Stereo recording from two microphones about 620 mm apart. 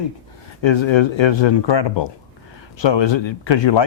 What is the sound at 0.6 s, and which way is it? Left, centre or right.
Speech, left.